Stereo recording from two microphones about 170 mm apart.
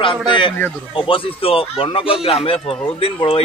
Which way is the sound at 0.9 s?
30° left (ahead or behind).